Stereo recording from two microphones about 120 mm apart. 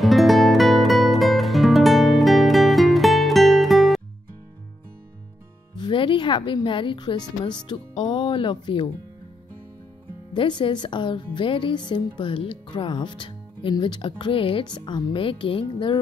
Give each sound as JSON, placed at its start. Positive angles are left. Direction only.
{"t": 0.0, "sound": "music", "side_deg": 0}
{"t": 5.8, "sound": "a woman's voice", "side_deg": 45}
{"t": 10.3, "sound": "speech", "side_deg": 45}
{"t": 15.1, "sound": "speech", "side_deg": 45}